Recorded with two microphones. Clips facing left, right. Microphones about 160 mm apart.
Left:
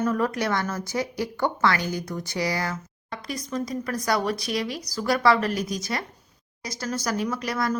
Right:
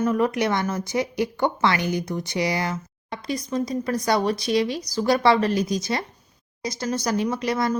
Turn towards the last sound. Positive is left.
turn(degrees=-20)  # may be behind; listen again after turning